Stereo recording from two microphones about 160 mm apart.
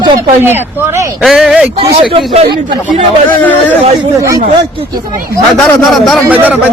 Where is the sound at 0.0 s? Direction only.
15° right (ahead or behind).